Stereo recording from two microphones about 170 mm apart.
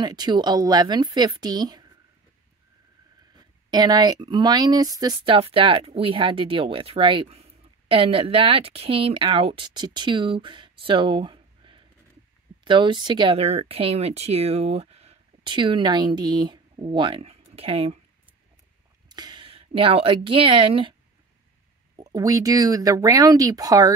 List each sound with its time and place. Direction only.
0.0 s speech: 25° right (ahead or behind)
3.3 s speech: 25° right (ahead or behind)
19.0 s a woman's voice: 25° right (ahead or behind)
21.9 s speech: 20° right (ahead or behind)